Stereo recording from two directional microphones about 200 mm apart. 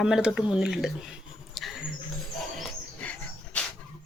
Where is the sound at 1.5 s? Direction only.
Centre (ahead or behind).